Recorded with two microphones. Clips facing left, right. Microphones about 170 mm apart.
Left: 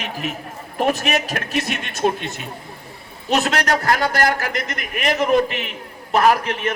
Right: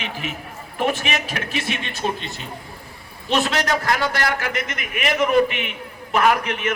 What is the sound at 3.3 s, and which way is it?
A man's voice, 45° left (ahead or behind).